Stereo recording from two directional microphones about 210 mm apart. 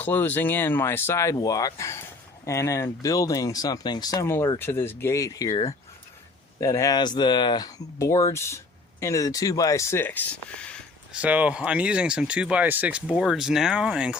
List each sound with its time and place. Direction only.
0.0 s speech: 10° left (ahead or behind)
11.1 s speech: 5° right (ahead or behind)